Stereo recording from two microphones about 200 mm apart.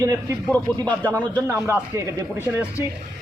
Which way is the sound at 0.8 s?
5° left (ahead or behind).